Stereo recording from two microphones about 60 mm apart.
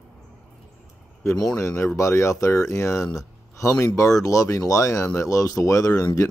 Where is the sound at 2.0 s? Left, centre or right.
Left.